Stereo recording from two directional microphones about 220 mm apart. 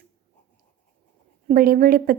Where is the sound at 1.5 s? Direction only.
40° right (ahead or behind).